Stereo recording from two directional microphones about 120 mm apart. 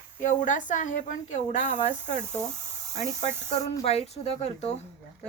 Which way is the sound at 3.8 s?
55° left (ahead or behind).